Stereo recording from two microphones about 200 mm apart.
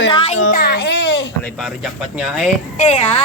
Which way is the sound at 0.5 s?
50° left (ahead or behind).